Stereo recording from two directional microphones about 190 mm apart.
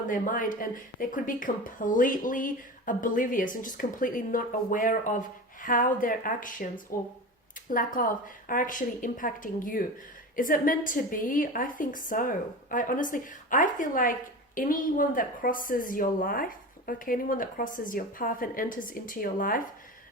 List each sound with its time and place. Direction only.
0.1 s speech: 45° left (ahead or behind)